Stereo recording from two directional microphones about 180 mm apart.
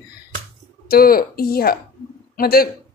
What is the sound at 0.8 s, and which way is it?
Speech, 55° left (ahead or behind).